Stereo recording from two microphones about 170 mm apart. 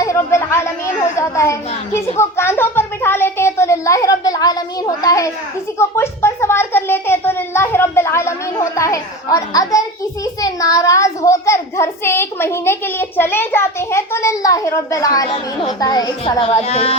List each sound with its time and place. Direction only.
0.0 s chatter: 15° left (ahead or behind)
1.1 s a sound: 15° left (ahead or behind)
10.4 s child singing: 20° left (ahead or behind); by 16.9 s 35° left (ahead or behind)